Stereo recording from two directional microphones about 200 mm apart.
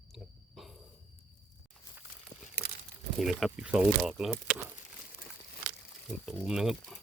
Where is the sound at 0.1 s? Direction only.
Centre (ahead or behind).